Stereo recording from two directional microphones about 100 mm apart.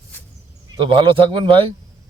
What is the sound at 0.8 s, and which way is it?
Speech, 60° right (ahead or behind).